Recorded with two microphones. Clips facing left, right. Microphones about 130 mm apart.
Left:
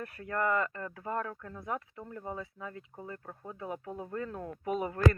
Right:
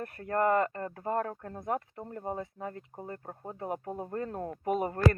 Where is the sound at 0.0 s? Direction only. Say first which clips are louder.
Right 4 dB; 40° right (ahead or behind).